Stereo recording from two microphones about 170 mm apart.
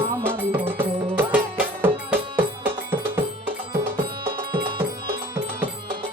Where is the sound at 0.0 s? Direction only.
15° right (ahead or behind).